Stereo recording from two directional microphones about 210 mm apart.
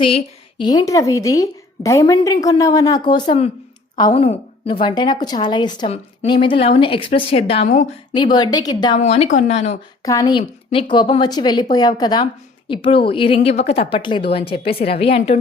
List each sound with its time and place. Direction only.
0.6 s a woman's voice: 20° left (ahead or behind)
8.1 s a woman's voice: 20° left (ahead or behind)
9.0 s speech: 30° left (ahead or behind)
10.0 s a woman's voice: 15° left (ahead or behind)